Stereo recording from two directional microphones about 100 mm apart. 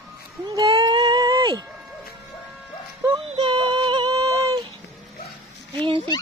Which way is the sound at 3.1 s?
50° right (ahead or behind).